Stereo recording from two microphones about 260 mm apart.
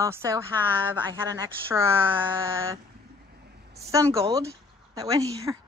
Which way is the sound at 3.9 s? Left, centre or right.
Centre.